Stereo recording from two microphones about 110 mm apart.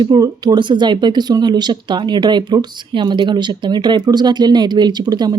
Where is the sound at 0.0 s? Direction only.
40° right (ahead or behind).